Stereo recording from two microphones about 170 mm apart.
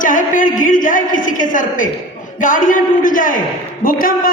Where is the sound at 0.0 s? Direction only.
50° left (ahead or behind).